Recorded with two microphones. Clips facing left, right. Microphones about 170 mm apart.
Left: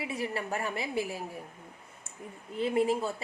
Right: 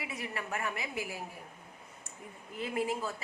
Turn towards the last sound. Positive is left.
turn(degrees=30)  # may be behind; listen again after turning